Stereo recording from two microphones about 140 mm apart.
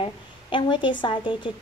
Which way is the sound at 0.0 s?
35° left (ahead or behind).